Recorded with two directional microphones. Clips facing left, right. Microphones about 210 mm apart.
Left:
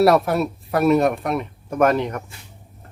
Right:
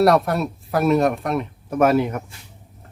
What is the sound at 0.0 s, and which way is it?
Speech, centre (ahead or behind).